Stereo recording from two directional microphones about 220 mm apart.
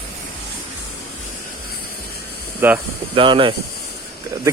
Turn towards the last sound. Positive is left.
turn(degrees=-25)  # may be behind; listen again after turning